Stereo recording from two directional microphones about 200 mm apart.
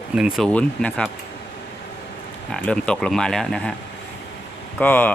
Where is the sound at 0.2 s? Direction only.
5° right (ahead or behind).